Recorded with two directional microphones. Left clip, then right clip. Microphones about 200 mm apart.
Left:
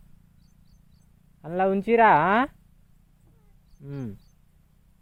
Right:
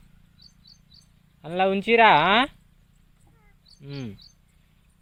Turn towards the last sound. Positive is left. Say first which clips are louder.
# even
turn(degrees=0)  # may be behind; listen again after turning